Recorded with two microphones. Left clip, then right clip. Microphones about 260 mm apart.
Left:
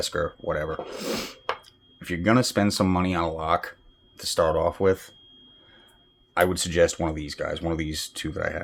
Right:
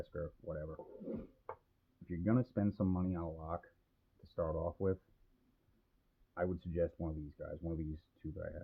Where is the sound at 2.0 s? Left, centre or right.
Centre.